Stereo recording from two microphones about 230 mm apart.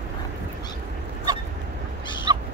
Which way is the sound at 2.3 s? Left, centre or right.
Centre.